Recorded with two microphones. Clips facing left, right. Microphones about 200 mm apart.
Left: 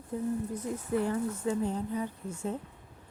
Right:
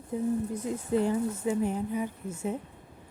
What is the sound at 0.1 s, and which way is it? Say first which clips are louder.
Speech: right 3 dB; 20° right (ahead or behind).